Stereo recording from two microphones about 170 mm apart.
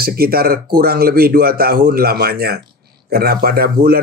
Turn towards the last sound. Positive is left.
turn(degrees=-60)  # may be behind; listen again after turning